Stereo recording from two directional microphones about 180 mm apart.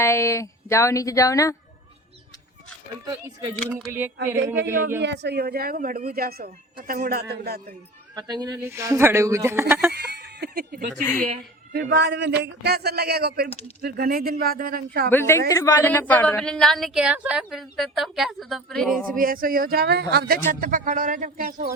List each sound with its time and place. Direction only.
0.0 s speech: 15° left (ahead or behind)
3.7 s speech: 5° right (ahead or behind)
4.9 s speech: 75° right (ahead or behind)
8.1 s speech: 20° right (ahead or behind)
9.9 s speech: 70° right (ahead or behind); by 11.1 s 50° right (ahead or behind)
11.7 s speech: 70° right (ahead or behind)
15.1 s a woman's voice: 15° left (ahead or behind)
19.1 s speech: 50° right (ahead or behind)
20.5 s speech: 45° right (ahead or behind)